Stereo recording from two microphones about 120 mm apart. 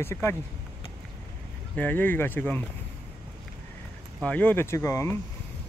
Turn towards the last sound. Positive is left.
turn(degrees=25)  # may be behind; listen again after turning